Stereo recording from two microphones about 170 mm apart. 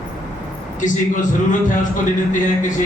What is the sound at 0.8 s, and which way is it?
A man's voice, 50° left (ahead or behind).